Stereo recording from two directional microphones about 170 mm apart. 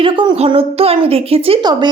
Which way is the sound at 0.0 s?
30° right (ahead or behind).